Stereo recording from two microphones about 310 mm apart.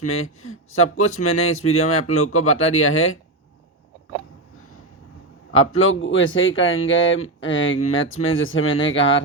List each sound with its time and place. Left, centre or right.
0.0 s speech: left
5.8 s speech: left